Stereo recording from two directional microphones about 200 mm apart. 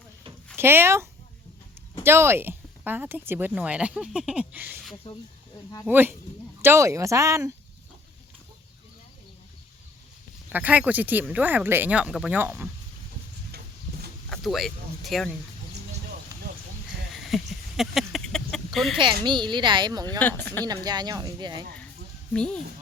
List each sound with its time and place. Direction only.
0.5 s speech: 10° right (ahead or behind)
2.0 s speech: 15° right (ahead or behind)
10.5 s speech: 10° right (ahead or behind)
14.3 s speech: centre (ahead or behind)
17.2 s a sound: centre (ahead or behind)
19.2 s speech: 20° right (ahead or behind)
20.1 s speech: 10° left (ahead or behind)
20.7 s speech: 20° right (ahead or behind)
22.3 s speech: 5° left (ahead or behind)